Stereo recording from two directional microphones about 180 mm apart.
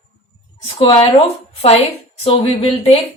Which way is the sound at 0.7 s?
30° left (ahead or behind).